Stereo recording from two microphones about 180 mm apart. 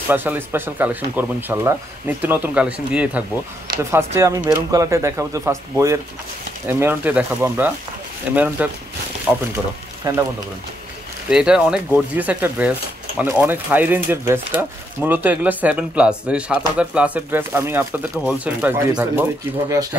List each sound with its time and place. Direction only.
0.1 s speech: 10° right (ahead or behind)
10.1 s speech: 20° right (ahead or behind)
11.2 s speech: 5° right (ahead or behind)